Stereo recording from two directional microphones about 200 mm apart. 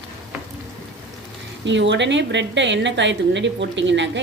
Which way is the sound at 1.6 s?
65° right (ahead or behind).